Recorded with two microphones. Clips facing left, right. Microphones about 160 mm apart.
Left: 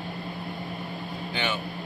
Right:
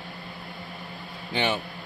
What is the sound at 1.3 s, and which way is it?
Speech, 30° right (ahead or behind).